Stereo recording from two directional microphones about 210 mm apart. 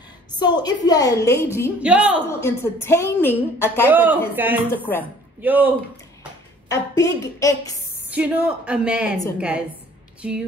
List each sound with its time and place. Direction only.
0.3 s a woman's voice: 20° left (ahead or behind)
1.8 s a woman's voice: 5° right (ahead or behind)
2.4 s a woman's voice: 10° left (ahead or behind)
3.8 s a woman's voice: 10° right (ahead or behind)
4.7 s a woman's voice: 10° left (ahead or behind)
5.4 s a woman's voice: 10° right (ahead or behind)
6.7 s a woman's voice: 15° left (ahead or behind)
8.1 s speech: 5° right (ahead or behind)